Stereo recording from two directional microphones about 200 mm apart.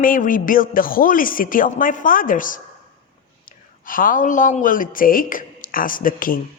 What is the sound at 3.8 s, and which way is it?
Speech, 45° left (ahead or behind).